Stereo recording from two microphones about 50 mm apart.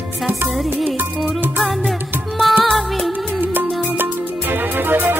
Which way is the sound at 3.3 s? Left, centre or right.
Right.